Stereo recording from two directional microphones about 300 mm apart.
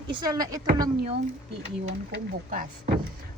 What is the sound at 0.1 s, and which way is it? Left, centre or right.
Speech, centre.